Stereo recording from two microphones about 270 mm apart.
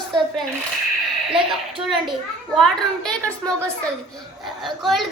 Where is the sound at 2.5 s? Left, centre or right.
Centre.